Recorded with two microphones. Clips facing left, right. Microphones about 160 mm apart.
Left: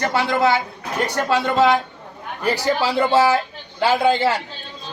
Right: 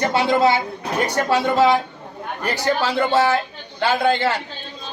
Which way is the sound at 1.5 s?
20° left (ahead or behind).